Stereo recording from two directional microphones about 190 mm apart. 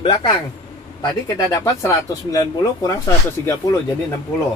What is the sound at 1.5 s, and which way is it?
Speech, 15° left (ahead or behind).